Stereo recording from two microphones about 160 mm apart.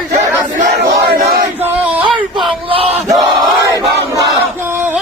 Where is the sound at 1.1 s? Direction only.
75° right (ahead or behind).